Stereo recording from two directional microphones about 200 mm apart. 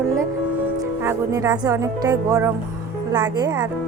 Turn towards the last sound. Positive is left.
turn(degrees=-20)  # may be behind; listen again after turning